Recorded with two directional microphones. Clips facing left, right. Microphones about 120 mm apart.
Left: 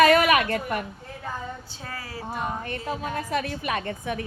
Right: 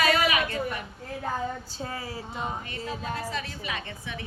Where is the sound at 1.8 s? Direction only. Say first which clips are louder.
Right 1 dB; 25° right (ahead or behind).